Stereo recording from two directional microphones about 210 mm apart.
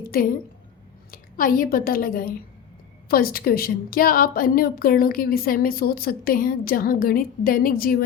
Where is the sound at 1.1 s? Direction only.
40° left (ahead or behind).